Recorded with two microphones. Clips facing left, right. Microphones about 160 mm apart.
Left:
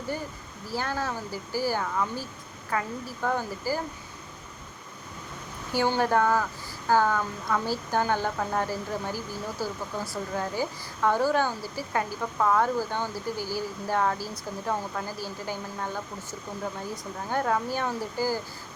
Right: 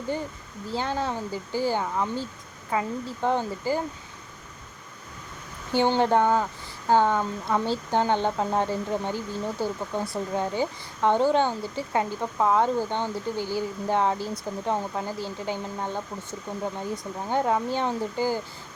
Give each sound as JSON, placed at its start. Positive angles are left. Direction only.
{"t": 0.7, "sound": "a woman's voice", "side_deg": -20}
{"t": 5.7, "sound": "a woman's voice", "side_deg": -20}